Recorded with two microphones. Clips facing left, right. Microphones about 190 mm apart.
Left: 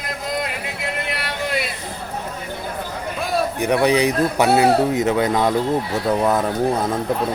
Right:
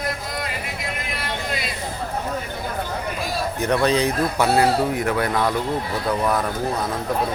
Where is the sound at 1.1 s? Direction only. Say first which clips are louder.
Left 2 dB; 70° left (ahead or behind).